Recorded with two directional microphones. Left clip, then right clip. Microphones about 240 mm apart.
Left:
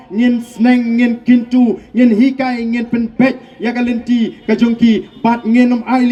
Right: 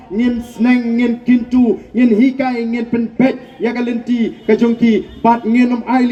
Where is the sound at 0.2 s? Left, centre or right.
Left.